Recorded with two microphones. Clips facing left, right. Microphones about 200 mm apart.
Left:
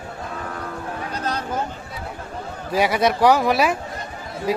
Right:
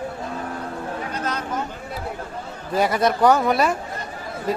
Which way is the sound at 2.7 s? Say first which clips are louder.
Left 1 dB; centre (ahead or behind).